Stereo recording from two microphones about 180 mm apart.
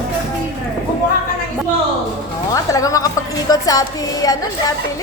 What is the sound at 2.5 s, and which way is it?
A woman's voice, 20° left (ahead or behind).